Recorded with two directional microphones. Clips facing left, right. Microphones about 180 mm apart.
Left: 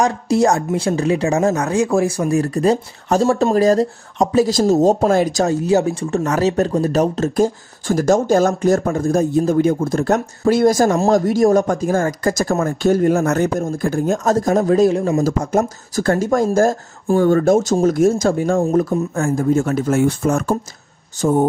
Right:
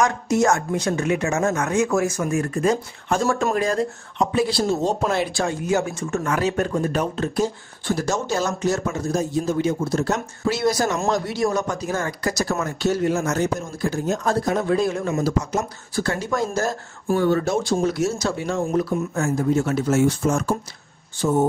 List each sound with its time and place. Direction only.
0.0 s speech: 35° left (ahead or behind); by 21.5 s 50° left (ahead or behind)